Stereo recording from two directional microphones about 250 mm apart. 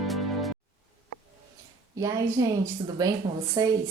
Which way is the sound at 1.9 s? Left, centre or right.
Centre.